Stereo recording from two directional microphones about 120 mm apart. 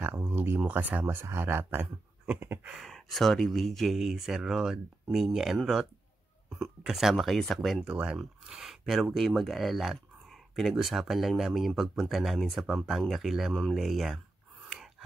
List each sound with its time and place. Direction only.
0.2 s a sound: 20° right (ahead or behind)
0.6 s speech: 15° right (ahead or behind)
2.7 s speech: centre (ahead or behind)
7.8 s speech: 10° right (ahead or behind)
14.7 s gasp: centre (ahead or behind)